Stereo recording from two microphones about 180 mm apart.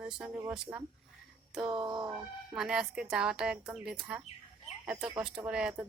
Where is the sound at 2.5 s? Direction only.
5° right (ahead or behind).